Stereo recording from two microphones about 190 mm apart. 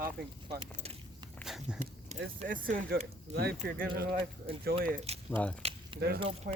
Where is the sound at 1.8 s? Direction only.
40° right (ahead or behind).